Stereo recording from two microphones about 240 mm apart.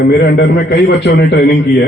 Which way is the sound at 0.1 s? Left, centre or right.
Left.